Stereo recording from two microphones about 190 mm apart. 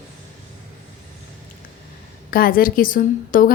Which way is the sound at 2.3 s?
50° left (ahead or behind).